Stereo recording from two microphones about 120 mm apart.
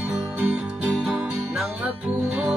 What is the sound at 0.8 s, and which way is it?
Music, 5° right (ahead or behind).